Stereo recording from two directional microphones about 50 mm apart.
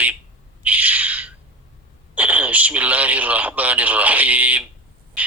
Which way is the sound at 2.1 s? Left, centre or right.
Right.